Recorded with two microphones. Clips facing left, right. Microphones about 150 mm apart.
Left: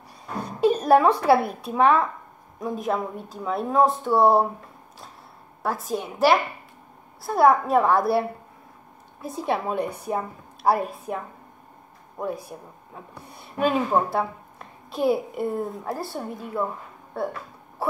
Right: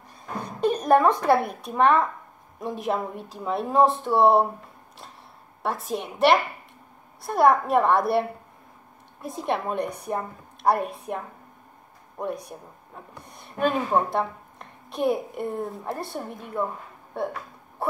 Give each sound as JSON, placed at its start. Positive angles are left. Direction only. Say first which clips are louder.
{"t": 0.6, "sound": "a sound", "louder": "left 2 dB", "side_deg": 5}
{"t": 1.2, "sound": "speech", "louder": "left 2 dB", "side_deg": 5}
{"t": 5.6, "sound": "speech", "louder": "left 1 dB", "side_deg": 0}
{"t": 12.2, "sound": "speech", "louder": "left 1 dB", "side_deg": 5}